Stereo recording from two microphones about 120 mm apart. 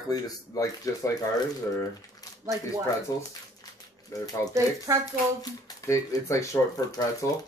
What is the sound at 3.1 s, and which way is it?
Speech, 30° left (ahead or behind).